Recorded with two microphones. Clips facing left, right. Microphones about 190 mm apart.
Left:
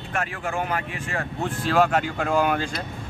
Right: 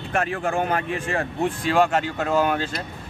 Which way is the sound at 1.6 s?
5° left (ahead or behind).